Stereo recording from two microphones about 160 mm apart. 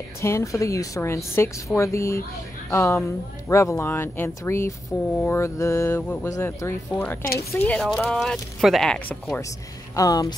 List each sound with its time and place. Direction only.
0.2 s a woman's voice: 20° left (ahead or behind)
9.9 s a woman's voice: 20° left (ahead or behind)